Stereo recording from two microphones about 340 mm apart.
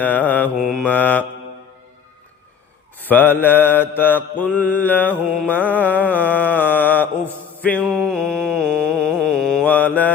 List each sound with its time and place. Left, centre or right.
0.0 s mantra: centre
3.0 s mantra: centre